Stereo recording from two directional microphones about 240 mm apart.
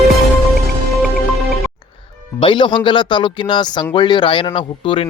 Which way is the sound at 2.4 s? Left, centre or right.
Centre.